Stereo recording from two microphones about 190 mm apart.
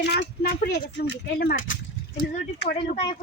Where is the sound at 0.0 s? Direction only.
60° left (ahead or behind); by 1.8 s 90° left.